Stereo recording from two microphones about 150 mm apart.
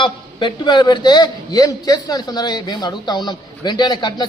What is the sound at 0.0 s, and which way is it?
A man's voice, 30° left (ahead or behind).